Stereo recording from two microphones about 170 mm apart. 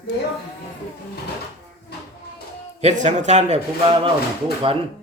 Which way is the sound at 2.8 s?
40° right (ahead or behind).